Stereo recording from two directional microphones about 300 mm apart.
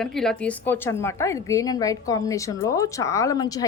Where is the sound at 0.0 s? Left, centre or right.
Centre.